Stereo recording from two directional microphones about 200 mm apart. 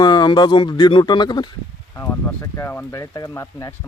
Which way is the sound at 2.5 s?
10° left (ahead or behind).